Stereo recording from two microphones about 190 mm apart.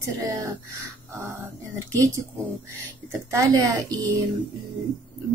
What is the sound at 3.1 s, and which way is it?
Speech, 20° right (ahead or behind).